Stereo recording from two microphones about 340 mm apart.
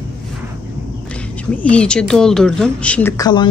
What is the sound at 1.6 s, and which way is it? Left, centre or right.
A woman's voice, centre.